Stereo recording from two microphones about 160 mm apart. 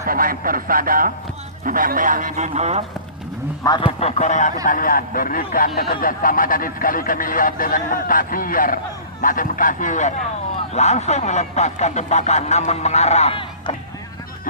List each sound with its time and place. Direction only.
0.0 s a man's voice: 65° right (ahead or behind); by 2.8 s 45° right (ahead or behind)
3.6 s speech: 25° left (ahead or behind)
4.0 s speech: 45° left (ahead or behind)